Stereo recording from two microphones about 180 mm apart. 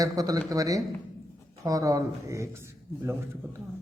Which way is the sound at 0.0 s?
20° right (ahead or behind).